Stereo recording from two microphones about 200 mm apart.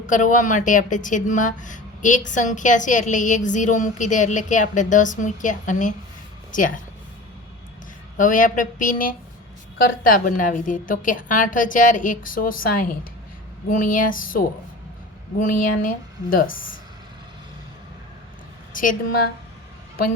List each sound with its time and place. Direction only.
0.1 s speech: 40° left (ahead or behind)
8.1 s speech: 40° left (ahead or behind)
18.7 s a woman's voice: 40° left (ahead or behind)